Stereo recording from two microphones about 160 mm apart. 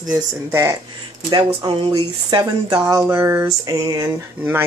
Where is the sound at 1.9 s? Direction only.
25° right (ahead or behind).